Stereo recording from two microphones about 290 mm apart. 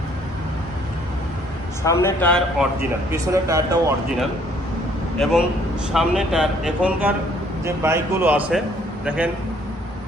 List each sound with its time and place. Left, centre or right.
1.8 s speech: centre
3.1 s a man's voice: centre
5.1 s a man's voice: centre